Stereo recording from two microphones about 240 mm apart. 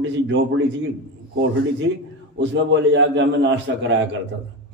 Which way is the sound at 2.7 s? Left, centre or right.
Right.